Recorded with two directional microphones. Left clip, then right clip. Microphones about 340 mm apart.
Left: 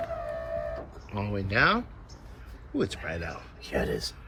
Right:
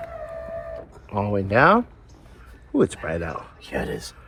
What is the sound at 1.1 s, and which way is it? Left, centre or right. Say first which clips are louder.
Speech: right 9 dB; centre.